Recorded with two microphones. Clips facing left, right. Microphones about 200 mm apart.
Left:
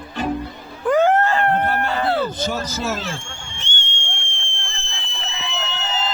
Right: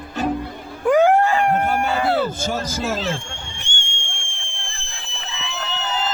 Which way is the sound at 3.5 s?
15° right (ahead or behind).